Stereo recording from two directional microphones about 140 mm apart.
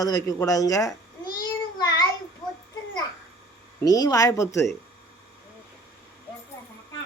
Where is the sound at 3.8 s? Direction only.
25° left (ahead or behind).